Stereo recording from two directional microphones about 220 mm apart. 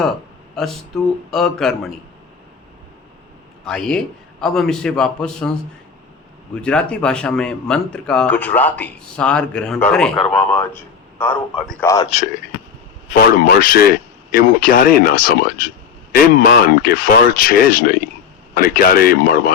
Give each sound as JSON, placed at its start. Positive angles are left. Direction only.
{"t": 0.6, "sound": "speech", "side_deg": 0}
{"t": 3.7, "sound": "speech", "side_deg": 5}
{"t": 6.6, "sound": "a man's voice", "side_deg": 5}
{"t": 12.1, "sound": "speech", "side_deg": 30}